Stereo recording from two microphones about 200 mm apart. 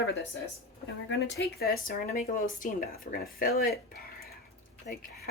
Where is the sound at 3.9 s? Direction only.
50° left (ahead or behind).